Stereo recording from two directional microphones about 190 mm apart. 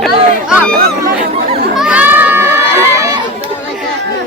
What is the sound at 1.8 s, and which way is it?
Crowd, 5° right (ahead or behind).